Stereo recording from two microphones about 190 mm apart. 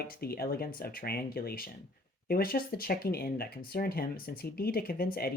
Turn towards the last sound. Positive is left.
turn(degrees=50)  # may be behind; listen again after turning